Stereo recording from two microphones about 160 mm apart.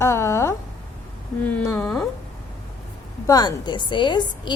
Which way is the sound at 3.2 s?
20° left (ahead or behind).